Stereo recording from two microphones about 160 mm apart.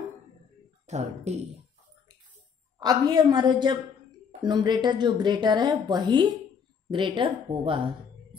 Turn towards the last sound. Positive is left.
turn(degrees=-30)  # may be behind; listen again after turning